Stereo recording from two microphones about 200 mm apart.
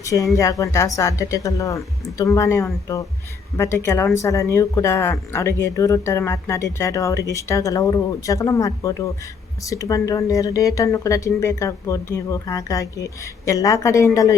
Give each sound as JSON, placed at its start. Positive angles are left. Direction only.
{"t": 0.0, "sound": "speech", "side_deg": 15}